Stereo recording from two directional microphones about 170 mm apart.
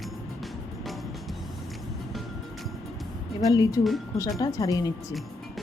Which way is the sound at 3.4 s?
20° left (ahead or behind).